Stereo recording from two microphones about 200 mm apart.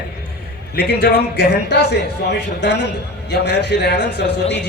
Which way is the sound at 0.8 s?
50° left (ahead or behind).